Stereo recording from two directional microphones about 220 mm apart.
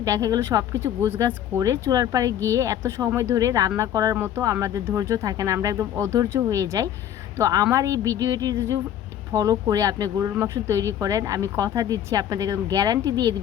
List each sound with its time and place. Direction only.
0.0 s speech: 15° right (ahead or behind)